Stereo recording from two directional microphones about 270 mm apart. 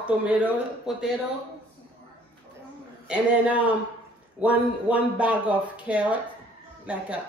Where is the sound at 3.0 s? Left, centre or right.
Centre.